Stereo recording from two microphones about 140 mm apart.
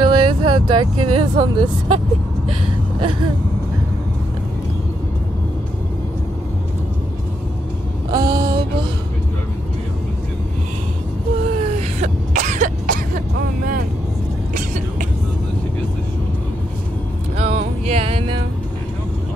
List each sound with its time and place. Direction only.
0.0 s speech: 35° right (ahead or behind)
8.1 s a sound: 30° right (ahead or behind)
12.0 s cough: 60° right (ahead or behind); by 13.2 s 80° right
17.4 s music: 50° right (ahead or behind)